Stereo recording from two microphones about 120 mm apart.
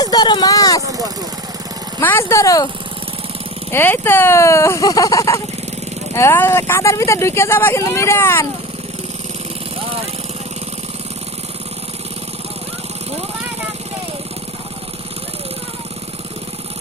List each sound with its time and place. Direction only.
0.0 s speech: 35° left (ahead or behind)
2.0 s speech: 20° left (ahead or behind)
3.7 s speech: 20° left (ahead or behind)